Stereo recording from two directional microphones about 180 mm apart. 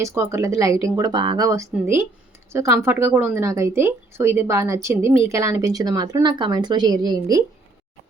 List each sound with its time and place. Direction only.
0.0 s speech: 15° right (ahead or behind)